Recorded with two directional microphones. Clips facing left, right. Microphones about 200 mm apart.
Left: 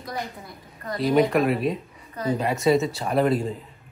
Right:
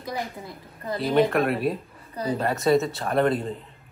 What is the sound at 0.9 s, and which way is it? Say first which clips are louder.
Speech: left 1 dB; centre (ahead or behind).